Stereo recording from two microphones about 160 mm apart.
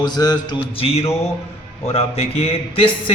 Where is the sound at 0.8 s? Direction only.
40° left (ahead or behind).